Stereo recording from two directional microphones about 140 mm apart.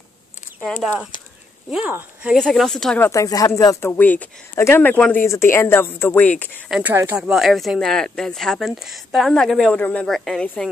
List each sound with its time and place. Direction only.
1.7 s speech: 10° right (ahead or behind)
2.3 s speech: 5° left (ahead or behind)
3.0 s speech: 20° left (ahead or behind)
6.7 s speech: 10° right (ahead or behind)
7.2 s speech: 5° right (ahead or behind)